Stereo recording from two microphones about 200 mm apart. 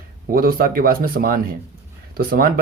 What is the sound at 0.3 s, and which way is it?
Speech, 45° right (ahead or behind).